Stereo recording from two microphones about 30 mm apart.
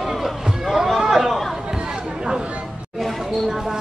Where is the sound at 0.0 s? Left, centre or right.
Centre.